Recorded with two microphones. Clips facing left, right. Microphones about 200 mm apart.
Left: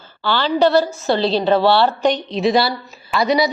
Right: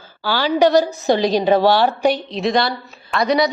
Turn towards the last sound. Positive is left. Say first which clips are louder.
# even
turn(degrees=0)  # may be behind; listen again after turning